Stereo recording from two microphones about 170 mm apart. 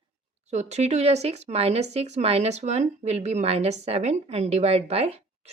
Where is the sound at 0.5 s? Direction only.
40° right (ahead or behind).